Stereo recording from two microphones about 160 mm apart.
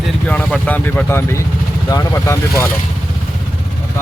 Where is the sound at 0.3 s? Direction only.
5° left (ahead or behind).